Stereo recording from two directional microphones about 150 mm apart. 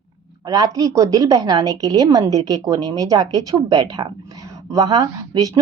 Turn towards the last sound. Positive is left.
turn(degrees=-25)  # may be behind; listen again after turning